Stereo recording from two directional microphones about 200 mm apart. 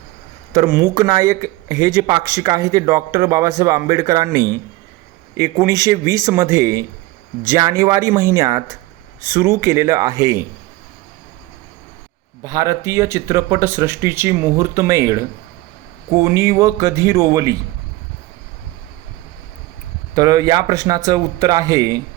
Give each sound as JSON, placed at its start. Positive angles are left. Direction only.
{"t": 0.5, "sound": "speech", "side_deg": -15}
{"t": 12.4, "sound": "speech", "side_deg": -15}
{"t": 20.1, "sound": "speech", "side_deg": -20}